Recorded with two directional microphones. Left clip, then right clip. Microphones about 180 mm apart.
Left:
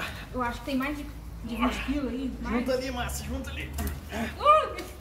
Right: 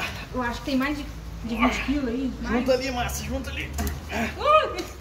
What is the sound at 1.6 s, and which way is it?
A man's voice, 5° left (ahead or behind).